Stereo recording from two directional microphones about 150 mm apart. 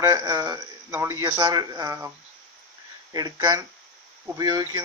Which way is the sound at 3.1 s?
25° right (ahead or behind).